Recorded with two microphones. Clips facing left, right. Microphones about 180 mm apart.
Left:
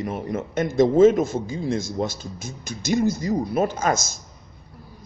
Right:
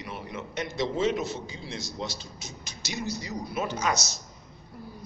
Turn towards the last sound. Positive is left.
turn(degrees=50)  # may be behind; listen again after turning